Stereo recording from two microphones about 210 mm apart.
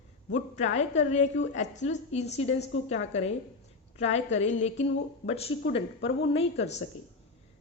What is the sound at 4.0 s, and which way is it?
A woman's voice, 30° left (ahead or behind).